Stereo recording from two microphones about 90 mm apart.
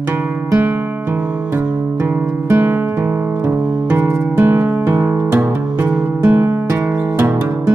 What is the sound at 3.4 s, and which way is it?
Music, 10° right (ahead or behind).